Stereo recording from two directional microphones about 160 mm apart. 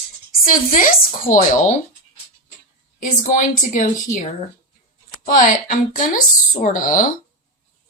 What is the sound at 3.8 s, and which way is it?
Speech, 50° left (ahead or behind).